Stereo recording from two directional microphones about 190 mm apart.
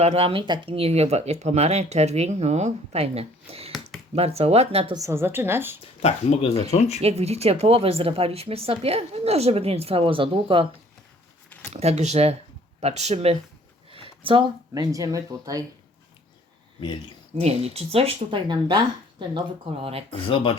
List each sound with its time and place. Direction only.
0.0 s speech: 30° right (ahead or behind)
4.9 s a woman's voice: 15° right (ahead or behind)
5.8 s speech: 30° left (ahead or behind)
7.0 s speech: 35° right (ahead or behind)
11.4 s a sound: 10° left (ahead or behind)
11.7 s speech: 35° right (ahead or behind); by 15.6 s 20° right (ahead or behind)
17.4 s speech: 30° right (ahead or behind)
19.8 s speech: 30° right (ahead or behind)
20.2 s speech: 30° left (ahead or behind)